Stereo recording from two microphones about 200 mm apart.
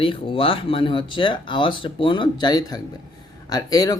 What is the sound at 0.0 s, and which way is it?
Speech, 25° left (ahead or behind).